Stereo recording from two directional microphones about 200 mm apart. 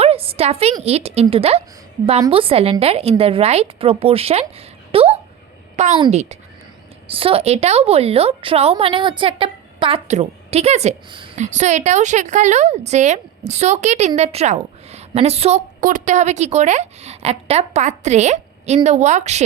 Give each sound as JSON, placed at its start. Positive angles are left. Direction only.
{"t": 0.0, "sound": "a woman's voice", "side_deg": -30}